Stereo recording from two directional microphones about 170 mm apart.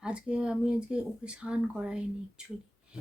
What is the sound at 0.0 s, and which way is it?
Speech, 5° right (ahead or behind).